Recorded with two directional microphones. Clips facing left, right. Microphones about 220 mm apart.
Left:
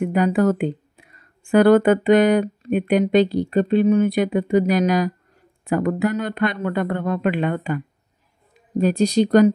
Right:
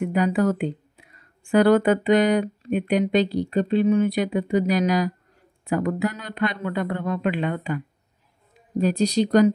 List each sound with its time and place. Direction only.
0.0 s speech: 55° left (ahead or behind)
8.8 s speech: 55° left (ahead or behind)